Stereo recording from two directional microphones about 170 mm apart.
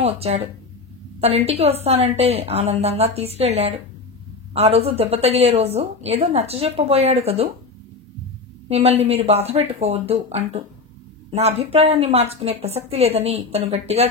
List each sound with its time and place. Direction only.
0.0 s a woman's voice: 35° right (ahead or behind)
8.6 s a woman's voice: 35° right (ahead or behind)